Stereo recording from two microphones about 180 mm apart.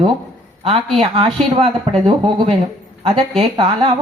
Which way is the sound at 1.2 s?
30° right (ahead or behind).